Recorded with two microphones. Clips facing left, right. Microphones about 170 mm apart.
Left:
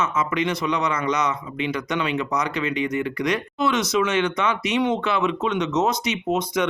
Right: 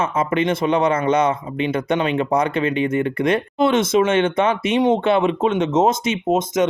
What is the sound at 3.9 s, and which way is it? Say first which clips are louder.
Speech: right 5 dB; 50° right (ahead or behind).